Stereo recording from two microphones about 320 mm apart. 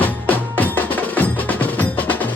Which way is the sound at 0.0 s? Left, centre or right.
Centre.